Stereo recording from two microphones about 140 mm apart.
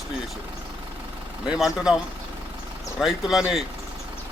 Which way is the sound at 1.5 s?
5° right (ahead or behind).